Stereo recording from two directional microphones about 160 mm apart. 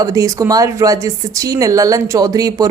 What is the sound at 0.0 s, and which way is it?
Speech, 20° right (ahead or behind).